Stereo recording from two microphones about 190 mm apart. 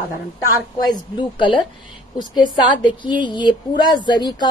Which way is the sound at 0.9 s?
25° left (ahead or behind).